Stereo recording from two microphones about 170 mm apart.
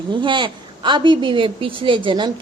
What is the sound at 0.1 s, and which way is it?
A woman's voice, 30° right (ahead or behind).